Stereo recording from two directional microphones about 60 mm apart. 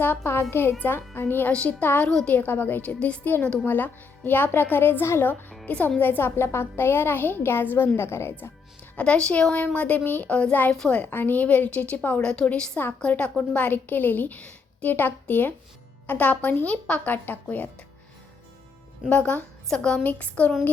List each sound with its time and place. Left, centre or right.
0.5 s a child's voice: left
2.0 s speech: centre
2.3 s a child's voice: left
2.9 s a woman's voice: centre
3.7 s a child's voice: left
6.0 s a child's voice: left
9.0 s speech: centre
9.7 s a woman's voice: left
12.2 s a woman's voice: centre; by 17.7 s left
19.0 s a woman's voice: left
20.0 s a woman's voice: left